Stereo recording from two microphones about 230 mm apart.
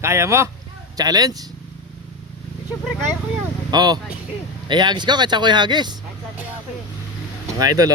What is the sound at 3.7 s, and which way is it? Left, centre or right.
Speech, centre.